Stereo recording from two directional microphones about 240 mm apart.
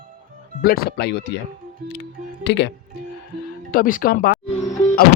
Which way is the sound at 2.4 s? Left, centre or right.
Left.